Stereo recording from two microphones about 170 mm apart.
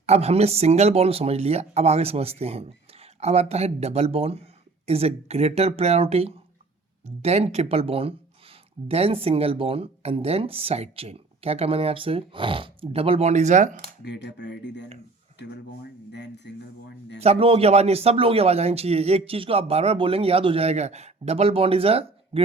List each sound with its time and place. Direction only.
0.0 s speech: 40° right (ahead or behind)
14.0 s speech: 80° left
17.2 s speech: 35° right (ahead or behind)